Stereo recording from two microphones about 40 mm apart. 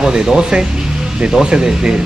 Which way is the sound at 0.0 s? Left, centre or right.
Centre.